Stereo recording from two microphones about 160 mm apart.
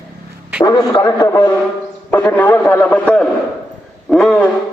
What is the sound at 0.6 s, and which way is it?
A man's voice, 25° left (ahead or behind).